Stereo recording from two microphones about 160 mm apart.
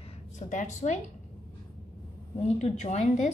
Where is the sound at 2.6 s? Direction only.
45° left (ahead or behind).